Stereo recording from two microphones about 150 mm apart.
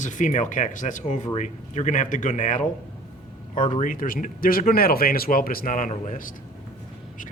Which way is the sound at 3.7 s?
60° left (ahead or behind).